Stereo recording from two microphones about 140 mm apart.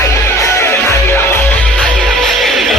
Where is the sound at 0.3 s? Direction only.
20° left (ahead or behind).